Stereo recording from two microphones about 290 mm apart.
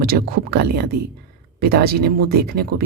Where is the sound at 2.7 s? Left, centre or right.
Right.